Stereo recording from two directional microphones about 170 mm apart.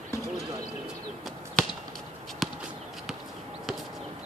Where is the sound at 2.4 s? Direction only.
Centre (ahead or behind).